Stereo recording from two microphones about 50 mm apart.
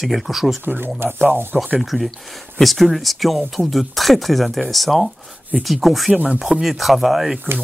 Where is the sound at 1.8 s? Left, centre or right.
Centre.